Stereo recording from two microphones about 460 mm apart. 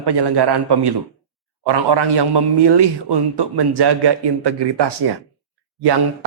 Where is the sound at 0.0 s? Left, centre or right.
Right.